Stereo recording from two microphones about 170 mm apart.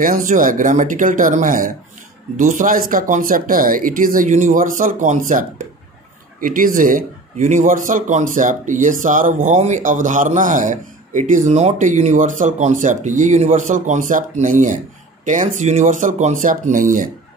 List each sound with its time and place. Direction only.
0.0 s speech: 55° right (ahead or behind)